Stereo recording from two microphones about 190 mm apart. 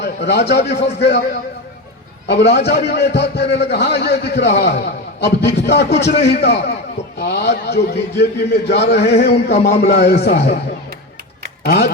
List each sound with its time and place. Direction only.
0.0 s a man's voice: 65° left (ahead or behind)
2.2 s a man's voice: 60° left (ahead or behind)
9.6 s a man's voice: 35° left (ahead or behind)
9.8 s a man's voice: 60° left (ahead or behind)
11.6 s speech: 55° left (ahead or behind)